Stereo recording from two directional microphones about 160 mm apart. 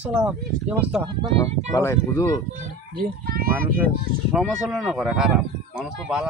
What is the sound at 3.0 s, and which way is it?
Speech, 65° right (ahead or behind).